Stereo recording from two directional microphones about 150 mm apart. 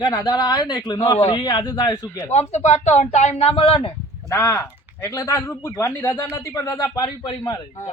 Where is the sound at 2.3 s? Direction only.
50° left (ahead or behind).